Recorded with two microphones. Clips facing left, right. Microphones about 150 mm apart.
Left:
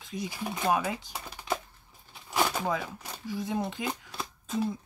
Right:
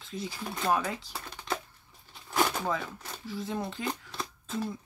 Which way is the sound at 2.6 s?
15° left (ahead or behind).